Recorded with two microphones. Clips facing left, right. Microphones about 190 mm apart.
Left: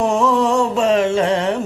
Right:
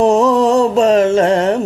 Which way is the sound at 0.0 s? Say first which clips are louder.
Right 5 dB; 40° right (ahead or behind).